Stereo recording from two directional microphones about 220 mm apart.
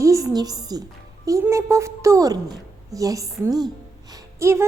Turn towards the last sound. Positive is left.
turn(degrees=-15)  # may be behind; listen again after turning